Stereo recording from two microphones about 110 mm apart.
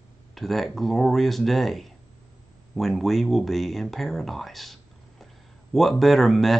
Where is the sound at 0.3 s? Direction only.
Centre (ahead or behind).